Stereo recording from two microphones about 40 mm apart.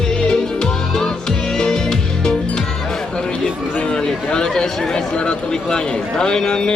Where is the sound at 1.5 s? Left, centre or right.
Centre.